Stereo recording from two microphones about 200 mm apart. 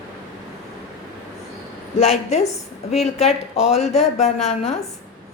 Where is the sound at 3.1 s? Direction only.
30° left (ahead or behind).